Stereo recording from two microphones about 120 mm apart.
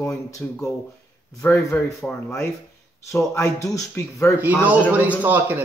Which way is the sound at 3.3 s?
25° left (ahead or behind).